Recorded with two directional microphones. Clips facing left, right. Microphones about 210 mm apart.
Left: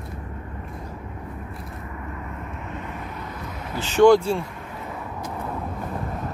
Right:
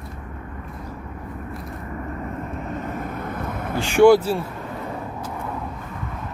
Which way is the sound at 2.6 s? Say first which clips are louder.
Right 5 dB; 40° right (ahead or behind).